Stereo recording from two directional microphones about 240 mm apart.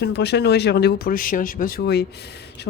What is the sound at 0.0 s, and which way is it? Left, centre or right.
Speech, left.